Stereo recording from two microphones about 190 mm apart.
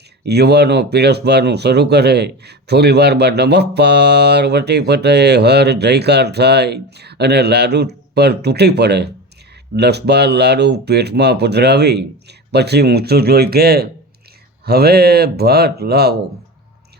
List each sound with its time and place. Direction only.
0.3 s speech: 60° right (ahead or behind)